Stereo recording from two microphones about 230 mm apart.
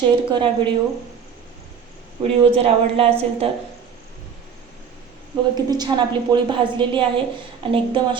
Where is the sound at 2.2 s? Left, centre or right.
Right.